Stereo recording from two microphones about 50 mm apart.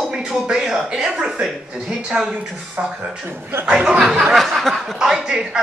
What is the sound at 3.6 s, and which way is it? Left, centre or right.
Speech, centre.